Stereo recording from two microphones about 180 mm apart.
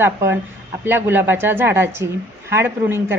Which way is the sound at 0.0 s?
15° right (ahead or behind).